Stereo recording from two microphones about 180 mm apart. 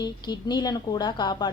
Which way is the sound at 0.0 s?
25° left (ahead or behind).